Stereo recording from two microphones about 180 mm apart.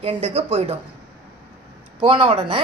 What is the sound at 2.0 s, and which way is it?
Speech, 30° right (ahead or behind).